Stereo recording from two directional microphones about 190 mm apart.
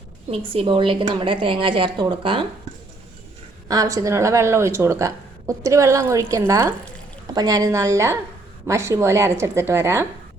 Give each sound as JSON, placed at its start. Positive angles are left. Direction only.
{"t": 0.3, "sound": "a woman's voice", "side_deg": -30}
{"t": 3.7, "sound": "a woman's voice", "side_deg": -20}